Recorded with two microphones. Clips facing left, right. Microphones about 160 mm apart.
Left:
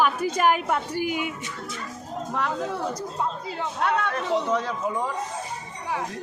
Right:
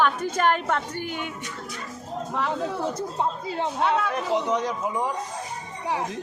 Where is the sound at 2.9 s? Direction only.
25° right (ahead or behind).